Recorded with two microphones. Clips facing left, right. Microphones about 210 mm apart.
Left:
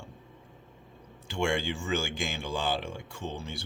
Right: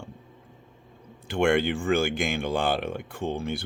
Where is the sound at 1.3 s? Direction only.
60° right (ahead or behind).